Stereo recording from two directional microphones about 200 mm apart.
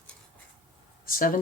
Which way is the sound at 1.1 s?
45° left (ahead or behind).